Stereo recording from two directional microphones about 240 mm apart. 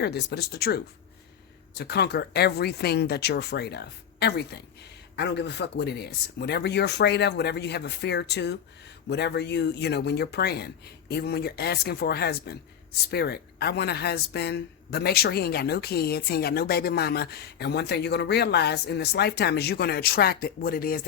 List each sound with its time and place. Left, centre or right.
0.0 s speech: left
1.8 s speech: left